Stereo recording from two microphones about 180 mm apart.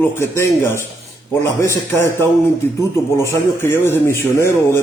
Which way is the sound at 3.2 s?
15° left (ahead or behind).